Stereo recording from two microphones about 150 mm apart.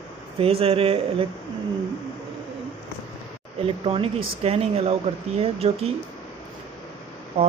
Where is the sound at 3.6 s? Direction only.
40° right (ahead or behind).